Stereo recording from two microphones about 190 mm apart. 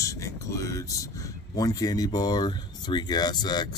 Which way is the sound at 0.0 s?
15° left (ahead or behind).